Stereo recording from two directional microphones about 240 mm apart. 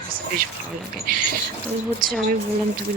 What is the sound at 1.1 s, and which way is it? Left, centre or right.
Speech, right.